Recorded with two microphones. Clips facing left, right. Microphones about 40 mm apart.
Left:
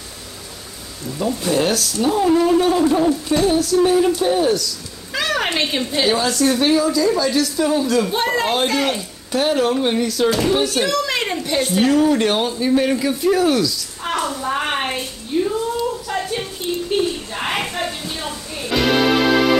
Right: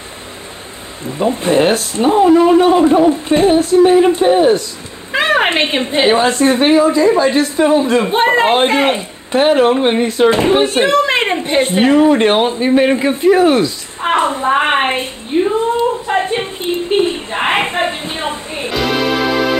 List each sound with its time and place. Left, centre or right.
1.0 s a woman's voice: right
18.7 s music: centre